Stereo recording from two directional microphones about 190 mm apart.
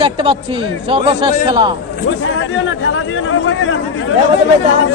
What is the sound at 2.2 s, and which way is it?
Speech, 90° left.